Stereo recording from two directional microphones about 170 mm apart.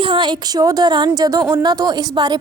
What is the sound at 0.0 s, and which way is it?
A woman's voice, 30° right (ahead or behind).